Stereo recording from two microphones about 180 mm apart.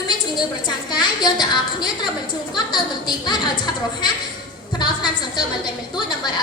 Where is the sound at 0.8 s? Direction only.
25° left (ahead or behind).